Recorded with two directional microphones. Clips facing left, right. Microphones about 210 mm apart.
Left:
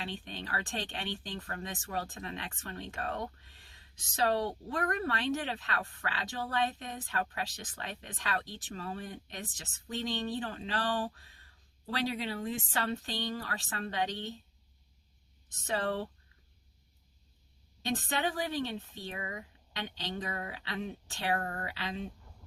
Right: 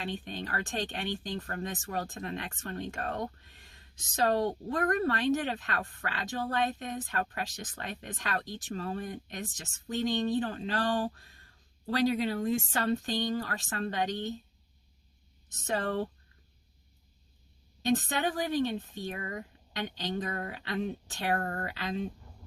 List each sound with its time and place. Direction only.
0.0 s speech: 45° right (ahead or behind)
15.6 s speech: 45° right (ahead or behind)
17.8 s speech: 45° right (ahead or behind)